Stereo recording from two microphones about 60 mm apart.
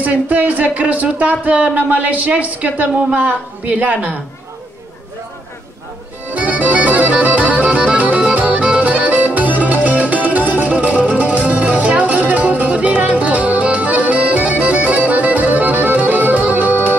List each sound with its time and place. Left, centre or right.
0.0 s speech: right
6.3 s music: right